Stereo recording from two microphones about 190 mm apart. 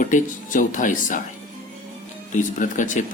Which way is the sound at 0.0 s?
45° left (ahead or behind).